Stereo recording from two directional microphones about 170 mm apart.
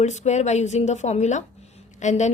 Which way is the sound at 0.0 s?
45° left (ahead or behind).